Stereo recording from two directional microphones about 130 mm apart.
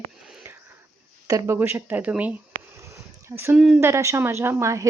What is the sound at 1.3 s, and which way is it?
Speech, 25° right (ahead or behind).